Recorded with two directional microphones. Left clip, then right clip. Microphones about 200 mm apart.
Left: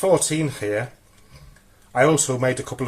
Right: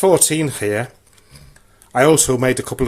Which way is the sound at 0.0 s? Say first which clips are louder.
Right 5 dB; 50° right (ahead or behind).